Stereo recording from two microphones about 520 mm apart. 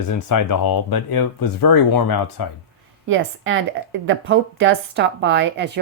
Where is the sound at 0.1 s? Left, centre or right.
Left.